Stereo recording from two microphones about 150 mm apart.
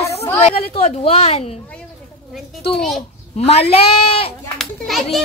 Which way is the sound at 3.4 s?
40° left (ahead or behind).